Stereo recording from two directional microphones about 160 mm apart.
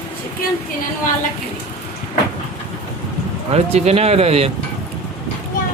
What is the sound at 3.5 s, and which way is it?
Speech, 40° right (ahead or behind).